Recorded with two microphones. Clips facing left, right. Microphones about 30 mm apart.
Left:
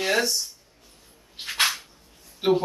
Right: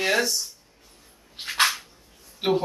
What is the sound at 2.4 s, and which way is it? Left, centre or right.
Speech, centre.